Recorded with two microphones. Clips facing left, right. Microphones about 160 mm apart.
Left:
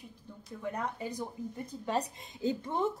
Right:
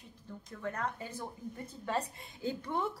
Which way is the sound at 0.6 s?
15° left (ahead or behind).